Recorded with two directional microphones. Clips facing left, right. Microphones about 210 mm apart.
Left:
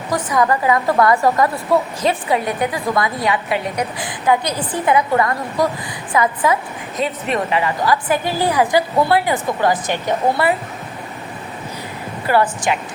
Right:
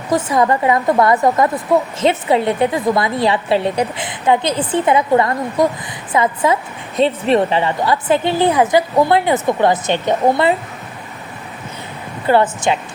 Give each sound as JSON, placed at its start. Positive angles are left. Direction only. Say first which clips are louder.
{"t": 0.1, "sound": "a woman's voice", "louder": "right 3 dB", "side_deg": -25}
{"t": 12.2, "sound": "a woman's voice", "louder": "right 3 dB", "side_deg": -25}